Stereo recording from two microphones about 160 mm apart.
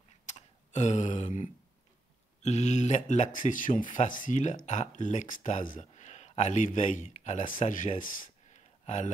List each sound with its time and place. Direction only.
0.3 s tick: 45° left (ahead or behind)
2.4 s speech: 45° left (ahead or behind)
8.5 s a sound: 50° left (ahead or behind)